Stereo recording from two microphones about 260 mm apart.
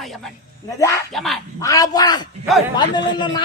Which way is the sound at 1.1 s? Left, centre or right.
Centre.